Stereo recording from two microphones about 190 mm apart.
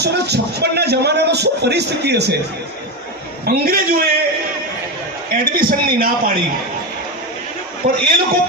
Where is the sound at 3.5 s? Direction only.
50° right (ahead or behind).